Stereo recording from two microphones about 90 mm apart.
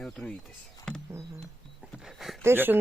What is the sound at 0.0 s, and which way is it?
Speech, 5° left (ahead or behind).